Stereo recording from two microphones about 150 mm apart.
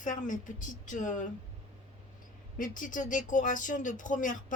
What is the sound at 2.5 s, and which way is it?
Speech, 65° left (ahead or behind).